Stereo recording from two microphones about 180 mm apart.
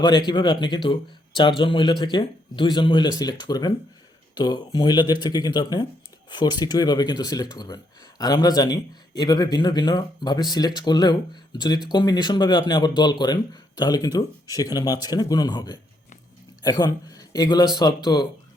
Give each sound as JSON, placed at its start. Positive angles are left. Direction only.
{"t": 0.0, "sound": "speech", "side_deg": 25}